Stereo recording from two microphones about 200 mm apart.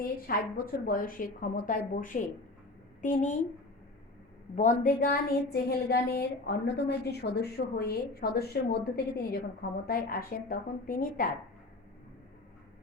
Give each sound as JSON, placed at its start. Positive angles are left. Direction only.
{"t": 0.0, "sound": "a woman's voice", "side_deg": 45}
{"t": 4.5, "sound": "a woman's voice", "side_deg": 40}